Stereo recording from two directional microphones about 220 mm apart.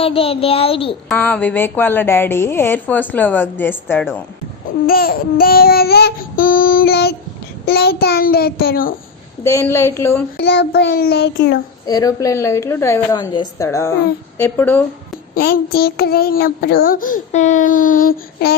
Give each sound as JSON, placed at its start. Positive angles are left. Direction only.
{"t": 0.0, "sound": "speech", "side_deg": 25}
{"t": 1.0, "sound": "a woman's voice", "side_deg": 5}
{"t": 4.9, "sound": "child singing", "side_deg": 45}
{"t": 9.4, "sound": "a woman's voice", "side_deg": 15}
{"t": 10.3, "sound": "child singing", "side_deg": 50}
{"t": 11.9, "sound": "a woman's voice", "side_deg": 15}
{"t": 15.4, "sound": "a child's voice", "side_deg": 45}